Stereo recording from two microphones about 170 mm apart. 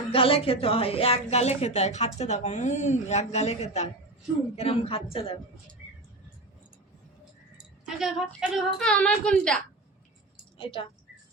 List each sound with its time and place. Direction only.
0.1 s speech: 35° left (ahead or behind)
7.9 s speech: 5° right (ahead or behind)
10.6 s speech: 30° left (ahead or behind)